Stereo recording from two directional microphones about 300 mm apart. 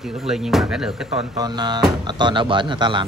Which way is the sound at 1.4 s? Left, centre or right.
Centre.